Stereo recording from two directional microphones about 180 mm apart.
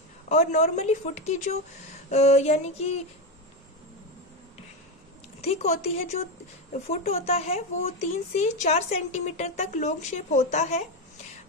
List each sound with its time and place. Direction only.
0.3 s speech: 40° left (ahead or behind)
5.4 s a woman's voice: 35° left (ahead or behind)
6.9 s speech: 35° left (ahead or behind)